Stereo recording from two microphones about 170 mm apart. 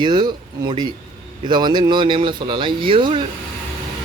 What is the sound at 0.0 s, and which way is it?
Speech, 25° right (ahead or behind).